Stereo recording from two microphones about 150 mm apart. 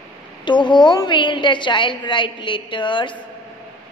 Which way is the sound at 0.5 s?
30° left (ahead or behind).